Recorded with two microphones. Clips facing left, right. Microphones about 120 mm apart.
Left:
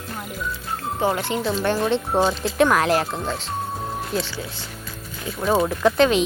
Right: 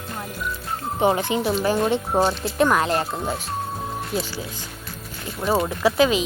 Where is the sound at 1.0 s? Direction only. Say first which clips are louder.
Right 3 dB; 20° right (ahead or behind).